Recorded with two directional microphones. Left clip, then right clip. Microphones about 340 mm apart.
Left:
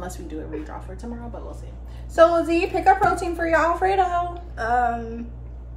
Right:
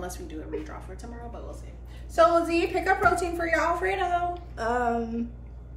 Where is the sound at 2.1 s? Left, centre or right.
Centre.